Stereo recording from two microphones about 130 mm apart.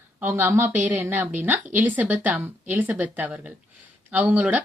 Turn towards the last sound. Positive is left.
turn(degrees=-15)  # may be behind; listen again after turning